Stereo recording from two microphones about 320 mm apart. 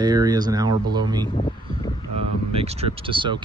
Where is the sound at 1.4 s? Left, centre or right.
Centre.